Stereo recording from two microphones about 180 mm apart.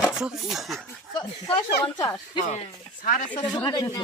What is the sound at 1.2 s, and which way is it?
Speech, 30° left (ahead or behind).